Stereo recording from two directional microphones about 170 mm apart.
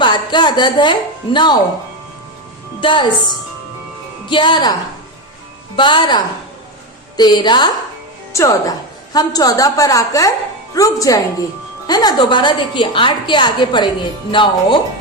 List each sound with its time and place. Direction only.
0.0 s a woman's voice: 25° left (ahead or behind)
2.8 s a woman's voice: 30° left (ahead or behind)
5.7 s a woman's voice: 30° left (ahead or behind)